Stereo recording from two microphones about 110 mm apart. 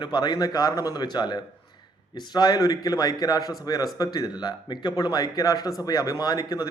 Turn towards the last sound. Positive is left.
turn(degrees=35)  # may be behind; listen again after turning